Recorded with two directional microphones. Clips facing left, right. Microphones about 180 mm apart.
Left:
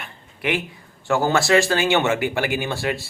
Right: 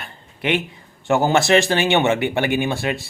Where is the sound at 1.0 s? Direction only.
20° right (ahead or behind).